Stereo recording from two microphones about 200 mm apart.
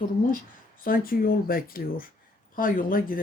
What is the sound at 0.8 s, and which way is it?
Speech, 45° left (ahead or behind).